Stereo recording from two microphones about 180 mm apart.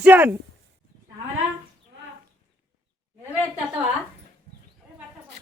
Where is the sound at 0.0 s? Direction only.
10° right (ahead or behind).